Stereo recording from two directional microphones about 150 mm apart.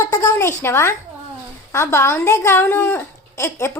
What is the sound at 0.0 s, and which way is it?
Speech, 20° left (ahead or behind).